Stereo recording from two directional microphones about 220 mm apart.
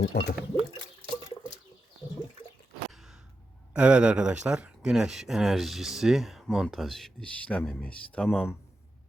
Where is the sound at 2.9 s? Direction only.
Centre (ahead or behind).